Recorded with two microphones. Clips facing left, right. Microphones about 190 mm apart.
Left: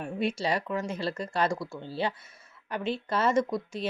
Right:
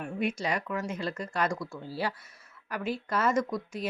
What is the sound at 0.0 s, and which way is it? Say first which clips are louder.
Speech: left 2 dB; 30° left (ahead or behind).